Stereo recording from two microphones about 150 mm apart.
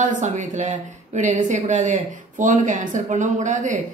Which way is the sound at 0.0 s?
55° right (ahead or behind).